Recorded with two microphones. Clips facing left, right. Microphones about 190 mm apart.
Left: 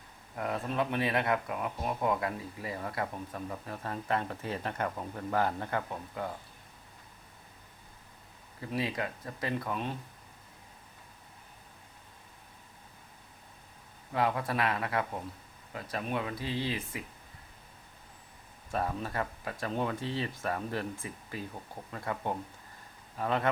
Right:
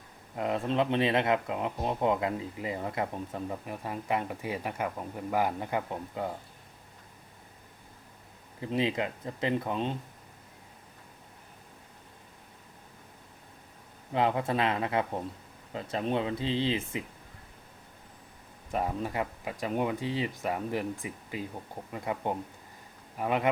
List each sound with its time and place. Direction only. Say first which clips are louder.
0.3 s speech: right 4 dB; 20° right (ahead or behind)
8.6 s speech: right 4 dB; 20° right (ahead or behind)
14.1 s speech: right 3 dB; 20° right (ahead or behind)
18.7 s speech: right 2 dB; 15° right (ahead or behind)